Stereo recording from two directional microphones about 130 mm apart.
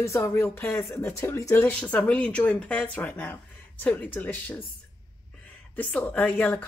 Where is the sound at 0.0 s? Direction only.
20° left (ahead or behind).